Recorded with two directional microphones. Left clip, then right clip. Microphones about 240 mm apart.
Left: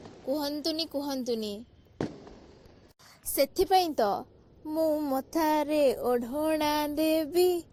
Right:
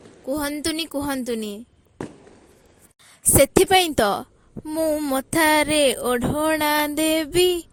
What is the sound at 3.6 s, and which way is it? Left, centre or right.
Speech, right.